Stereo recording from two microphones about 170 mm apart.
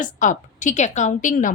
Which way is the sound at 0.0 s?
50° left (ahead or behind).